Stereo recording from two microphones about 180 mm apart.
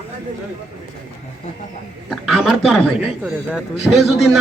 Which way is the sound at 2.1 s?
Centre (ahead or behind).